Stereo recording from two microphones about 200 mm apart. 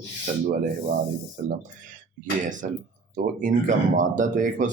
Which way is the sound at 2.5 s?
40° right (ahead or behind).